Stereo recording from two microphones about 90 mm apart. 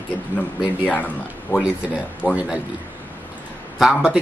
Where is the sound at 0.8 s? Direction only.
15° left (ahead or behind).